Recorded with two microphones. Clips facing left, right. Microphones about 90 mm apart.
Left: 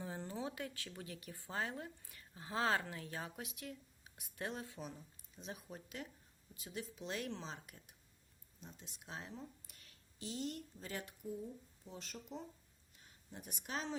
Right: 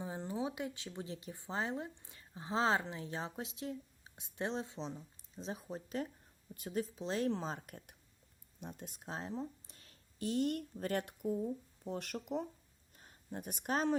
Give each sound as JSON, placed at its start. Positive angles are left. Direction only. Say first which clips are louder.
{"t": 0.0, "sound": "speech", "louder": "right 5 dB", "side_deg": -20}
{"t": 6.5, "sound": "speech", "louder": "right 9 dB", "side_deg": -50}
{"t": 9.0, "sound": "speech", "louder": "right 7 dB", "side_deg": -35}
{"t": 10.2, "sound": "speech", "louder": "right 9 dB", "side_deg": -50}
{"t": 13.0, "sound": "speech", "louder": "right 9 dB", "side_deg": -45}